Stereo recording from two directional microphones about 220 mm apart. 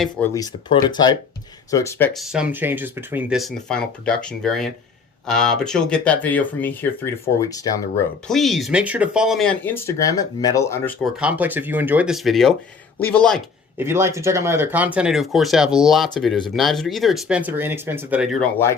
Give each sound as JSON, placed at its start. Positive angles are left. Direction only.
{"t": 0.3, "sound": "speech", "side_deg": 20}
{"t": 2.1, "sound": "speech", "side_deg": 0}
{"t": 8.3, "sound": "speech", "side_deg": 0}
{"t": 11.2, "sound": "speech", "side_deg": -5}
{"t": 13.7, "sound": "speech", "side_deg": -10}